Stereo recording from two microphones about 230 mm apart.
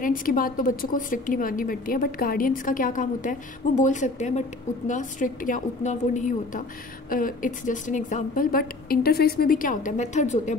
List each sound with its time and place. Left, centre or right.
0.0 s a woman's voice: left